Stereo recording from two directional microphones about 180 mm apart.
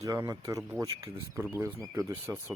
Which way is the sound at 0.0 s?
20° right (ahead or behind).